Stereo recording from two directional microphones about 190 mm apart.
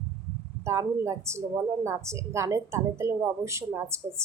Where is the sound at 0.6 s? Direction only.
15° right (ahead or behind).